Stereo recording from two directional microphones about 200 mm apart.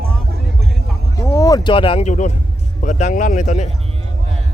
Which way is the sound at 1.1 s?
15° left (ahead or behind).